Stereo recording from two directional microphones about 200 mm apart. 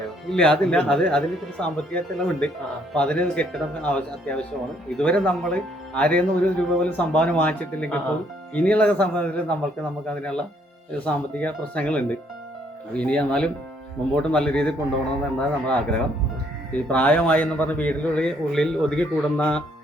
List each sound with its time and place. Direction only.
0.3 s speech: 5° left (ahead or behind)